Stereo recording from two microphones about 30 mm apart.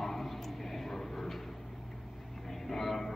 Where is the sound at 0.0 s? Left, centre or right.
Centre.